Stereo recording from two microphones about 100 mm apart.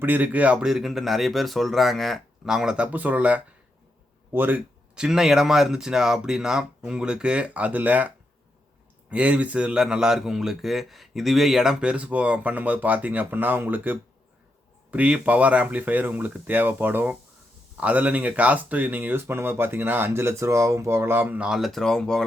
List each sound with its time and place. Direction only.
0.0 s a man's voice: 15° right (ahead or behind)
4.9 s a man's voice: 5° right (ahead or behind)